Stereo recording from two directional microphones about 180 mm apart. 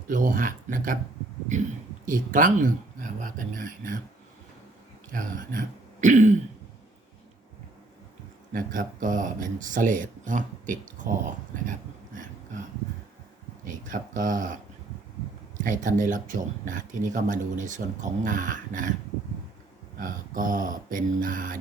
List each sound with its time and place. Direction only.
0.1 s speech: 50° right (ahead or behind)
5.1 s speech: 50° right (ahead or behind)
8.5 s speech: 50° right (ahead or behind)
11.6 s a sound: 45° right (ahead or behind)
13.7 s speech: 45° right (ahead or behind)
20.0 s speech: 50° right (ahead or behind)